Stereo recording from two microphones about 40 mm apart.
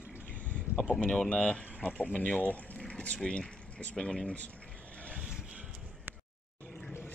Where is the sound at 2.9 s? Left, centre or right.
Left.